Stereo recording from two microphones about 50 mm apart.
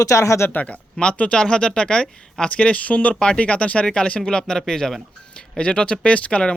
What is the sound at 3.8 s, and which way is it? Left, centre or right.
Speech, centre.